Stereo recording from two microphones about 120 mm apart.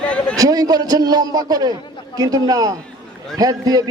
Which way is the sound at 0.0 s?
10° left (ahead or behind).